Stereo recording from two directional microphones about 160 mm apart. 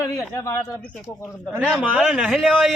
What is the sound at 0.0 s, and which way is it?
Speech, 20° left (ahead or behind).